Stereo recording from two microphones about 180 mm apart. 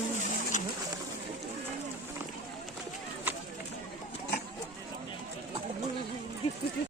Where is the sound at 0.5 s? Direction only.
40° left (ahead or behind).